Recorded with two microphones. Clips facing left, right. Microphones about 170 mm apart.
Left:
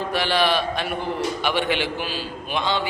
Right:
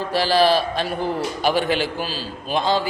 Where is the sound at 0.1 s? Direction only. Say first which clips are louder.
Right 5 dB; 35° right (ahead or behind).